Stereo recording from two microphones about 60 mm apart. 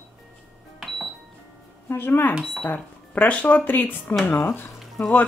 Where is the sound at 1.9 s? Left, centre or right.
Left.